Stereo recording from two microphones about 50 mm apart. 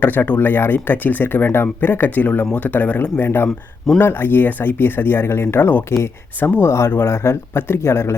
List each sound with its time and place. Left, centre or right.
0.0 s speech: left
3.2 s speech: left
6.0 s speech: left